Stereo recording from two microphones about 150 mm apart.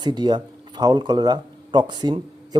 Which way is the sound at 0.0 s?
30° right (ahead or behind).